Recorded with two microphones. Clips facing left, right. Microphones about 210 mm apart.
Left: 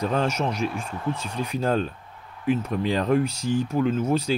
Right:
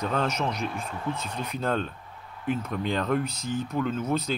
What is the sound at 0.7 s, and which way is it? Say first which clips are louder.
Speech: left 3 dB; 30° left (ahead or behind).